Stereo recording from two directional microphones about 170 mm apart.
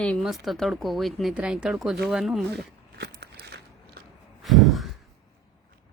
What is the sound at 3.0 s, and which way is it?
Biting, 75° right (ahead or behind).